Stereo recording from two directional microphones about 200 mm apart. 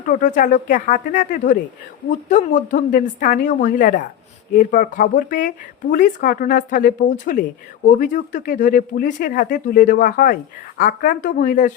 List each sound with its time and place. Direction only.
0.1 s speech: 40° left (ahead or behind)